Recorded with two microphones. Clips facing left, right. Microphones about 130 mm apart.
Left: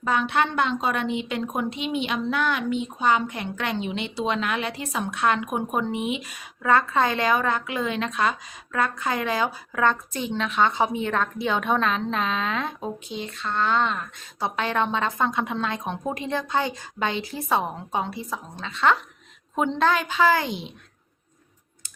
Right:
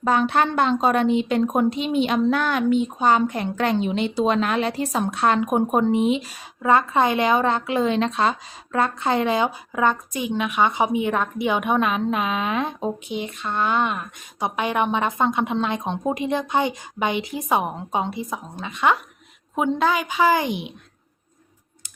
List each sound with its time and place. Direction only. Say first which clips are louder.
0.0 s a woman's voice: right 4 dB; 40° right (ahead or behind)
6.7 s a woman's voice: right 3 dB; 20° right (ahead or behind)